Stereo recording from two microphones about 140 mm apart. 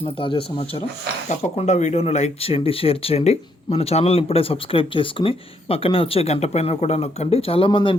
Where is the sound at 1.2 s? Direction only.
55° left (ahead or behind).